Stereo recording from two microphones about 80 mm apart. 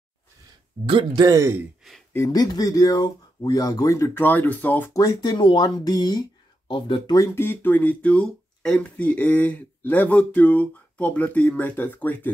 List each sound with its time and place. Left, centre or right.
0.8 s speech: right
1.4 s speech: right
2.3 s speech: left
4.1 s speech: left
4.9 s speech: left
5.8 s speech: left
6.7 s speech: left
7.3 s speech: left